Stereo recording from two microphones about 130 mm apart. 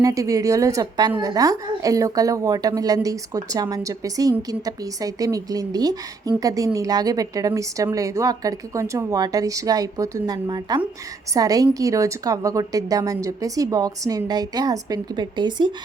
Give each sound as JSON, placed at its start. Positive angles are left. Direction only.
{"t": 0.0, "sound": "a woman's voice", "side_deg": -25}